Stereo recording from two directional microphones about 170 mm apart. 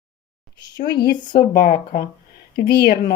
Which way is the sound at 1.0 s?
50° left (ahead or behind).